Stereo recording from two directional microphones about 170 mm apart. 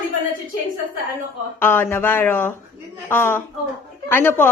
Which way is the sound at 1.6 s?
15° left (ahead or behind).